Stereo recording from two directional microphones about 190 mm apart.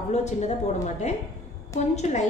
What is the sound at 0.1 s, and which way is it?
Speech, 35° left (ahead or behind).